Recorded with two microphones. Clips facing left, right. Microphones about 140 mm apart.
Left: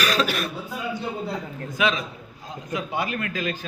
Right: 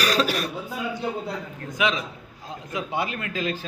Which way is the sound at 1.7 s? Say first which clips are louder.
Left 1 dB; 20° right (ahead or behind).